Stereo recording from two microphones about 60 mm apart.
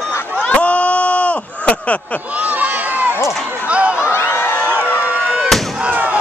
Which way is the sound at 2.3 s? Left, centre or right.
Right.